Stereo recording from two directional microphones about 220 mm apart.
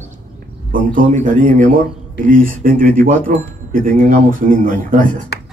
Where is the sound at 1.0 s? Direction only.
35° right (ahead or behind).